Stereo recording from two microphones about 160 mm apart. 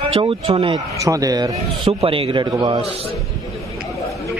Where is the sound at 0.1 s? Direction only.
35° right (ahead or behind).